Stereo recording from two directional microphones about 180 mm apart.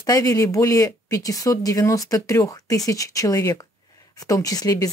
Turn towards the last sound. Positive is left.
turn(degrees=20)  # may be behind; listen again after turning